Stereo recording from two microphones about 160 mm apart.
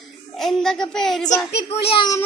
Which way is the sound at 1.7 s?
35° left (ahead or behind).